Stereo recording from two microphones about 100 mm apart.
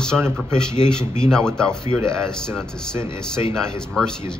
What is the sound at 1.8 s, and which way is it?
Speech, 30° right (ahead or behind).